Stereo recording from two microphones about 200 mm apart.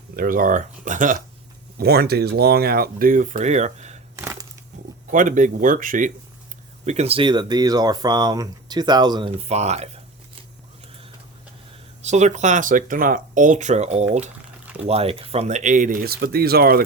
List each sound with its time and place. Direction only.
0.2 s speech: 45° right (ahead or behind)
1.8 s speech: 50° right (ahead or behind); by 3.9 s 35° right (ahead or behind)
4.2 s crushing: 15° right (ahead or behind)
5.1 s speech: 40° right (ahead or behind); by 9.3 s 20° right (ahead or behind)
9.3 s speech: 35° right (ahead or behind)
12.0 s speech: 35° right (ahead or behind)